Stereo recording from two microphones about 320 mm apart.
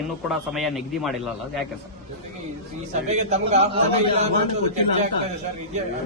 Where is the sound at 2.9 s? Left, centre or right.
Right.